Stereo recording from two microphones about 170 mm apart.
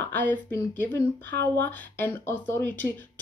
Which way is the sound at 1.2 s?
85° right.